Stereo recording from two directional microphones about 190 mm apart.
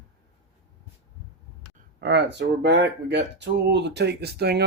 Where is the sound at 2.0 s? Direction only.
65° right (ahead or behind).